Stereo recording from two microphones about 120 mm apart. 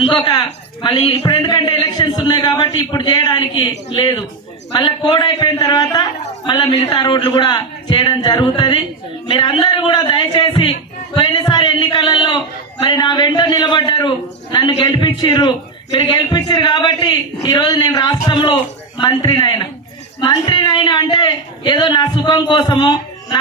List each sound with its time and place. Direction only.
0.3 s a man's voice: 35° left (ahead or behind)